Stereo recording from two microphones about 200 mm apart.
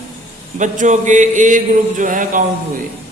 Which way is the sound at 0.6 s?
40° right (ahead or behind).